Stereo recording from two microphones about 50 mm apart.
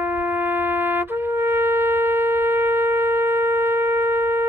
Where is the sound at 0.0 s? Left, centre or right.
Right.